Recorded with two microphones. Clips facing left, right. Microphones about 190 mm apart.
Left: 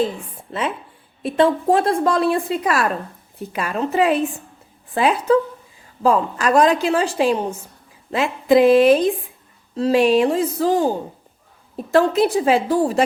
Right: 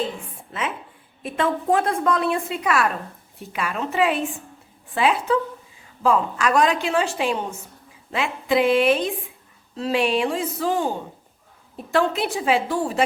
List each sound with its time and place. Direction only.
1.2 s a woman's voice: 35° left (ahead or behind)